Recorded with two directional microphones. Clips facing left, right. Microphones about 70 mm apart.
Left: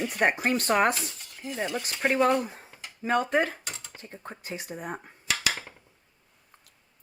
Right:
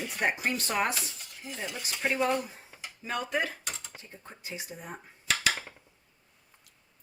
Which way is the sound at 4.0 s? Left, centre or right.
Left.